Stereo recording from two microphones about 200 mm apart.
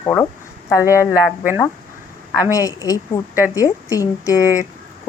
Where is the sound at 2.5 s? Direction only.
15° left (ahead or behind).